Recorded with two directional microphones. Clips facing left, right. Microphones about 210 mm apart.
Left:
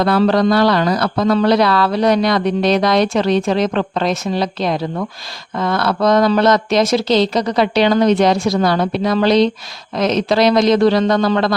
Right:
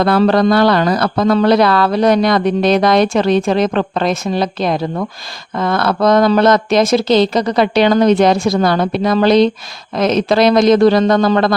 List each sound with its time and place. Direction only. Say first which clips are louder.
0.0 s speech: right 2 dB; 55° right (ahead or behind)